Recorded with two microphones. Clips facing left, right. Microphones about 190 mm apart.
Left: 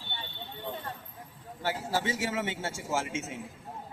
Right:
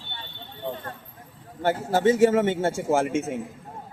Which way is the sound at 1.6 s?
55° right (ahead or behind).